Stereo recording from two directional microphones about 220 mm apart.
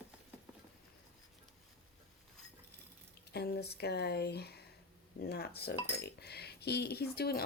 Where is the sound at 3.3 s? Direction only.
50° left (ahead or behind).